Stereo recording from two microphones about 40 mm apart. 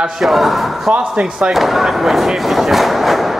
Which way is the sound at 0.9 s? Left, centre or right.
Right.